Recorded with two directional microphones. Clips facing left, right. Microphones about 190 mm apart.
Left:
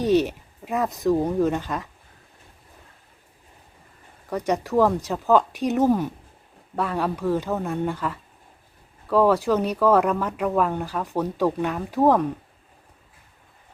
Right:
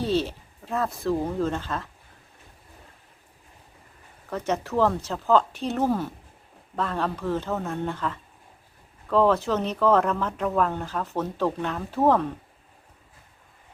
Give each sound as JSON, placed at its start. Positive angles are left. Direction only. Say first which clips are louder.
{"t": 0.0, "sound": "speech", "louder": "left 5 dB", "side_deg": 15}
{"t": 4.3, "sound": "speech", "louder": "left 3 dB", "side_deg": 15}